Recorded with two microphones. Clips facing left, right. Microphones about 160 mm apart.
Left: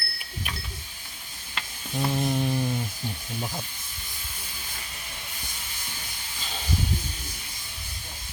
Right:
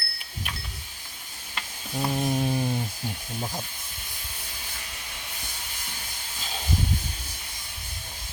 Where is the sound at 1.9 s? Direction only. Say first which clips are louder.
Even; 10° right (ahead or behind).